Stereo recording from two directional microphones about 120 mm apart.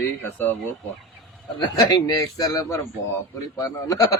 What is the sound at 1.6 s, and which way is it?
A man's voice, 35° left (ahead or behind).